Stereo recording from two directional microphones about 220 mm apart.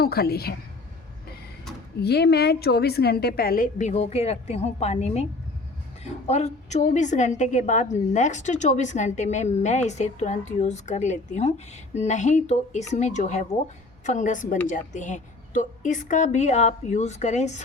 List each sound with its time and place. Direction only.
0.0 s a woman's voice: 45° left (ahead or behind)
2.0 s a woman's voice: 45° left (ahead or behind); by 5.2 s 30° left (ahead or behind)
6.2 s a woman's voice: 30° left (ahead or behind)